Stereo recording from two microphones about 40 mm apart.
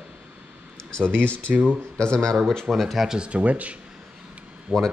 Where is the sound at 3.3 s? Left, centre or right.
Right.